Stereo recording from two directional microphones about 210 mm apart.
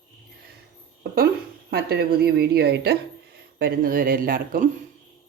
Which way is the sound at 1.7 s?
50° right (ahead or behind).